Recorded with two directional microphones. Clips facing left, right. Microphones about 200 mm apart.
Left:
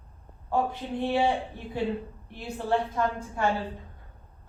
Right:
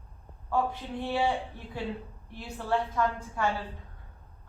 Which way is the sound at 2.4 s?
25° left (ahead or behind).